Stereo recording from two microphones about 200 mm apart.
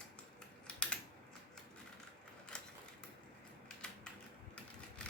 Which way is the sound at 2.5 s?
5° left (ahead or behind).